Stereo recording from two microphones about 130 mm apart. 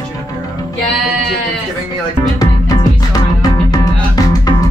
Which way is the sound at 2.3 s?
30° left (ahead or behind).